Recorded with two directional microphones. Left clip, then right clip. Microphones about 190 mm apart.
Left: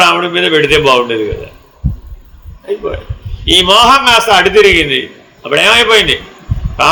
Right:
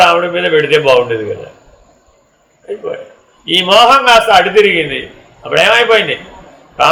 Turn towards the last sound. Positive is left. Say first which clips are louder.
# even
turn(degrees=55)  # may be behind; listen again after turning